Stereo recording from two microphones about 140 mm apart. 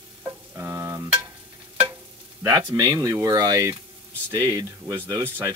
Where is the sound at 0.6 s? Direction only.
20° right (ahead or behind).